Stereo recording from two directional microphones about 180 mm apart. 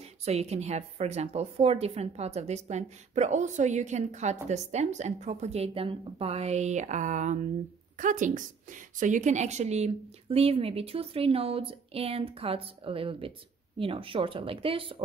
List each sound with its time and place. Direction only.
0.0 s a woman's voice: 35° right (ahead or behind)